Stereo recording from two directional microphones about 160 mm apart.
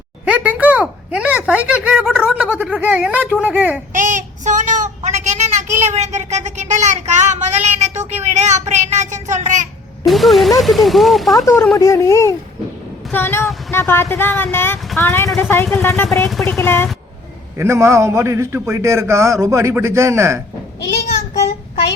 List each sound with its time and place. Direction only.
0.3 s a man's voice: 10° right (ahead or behind)
3.9 s speech: 55° right (ahead or behind)
10.1 s speech: centre (ahead or behind)
11.8 s a woman's voice: 20° left (ahead or behind)
17.6 s a man's voice: 15° right (ahead or behind)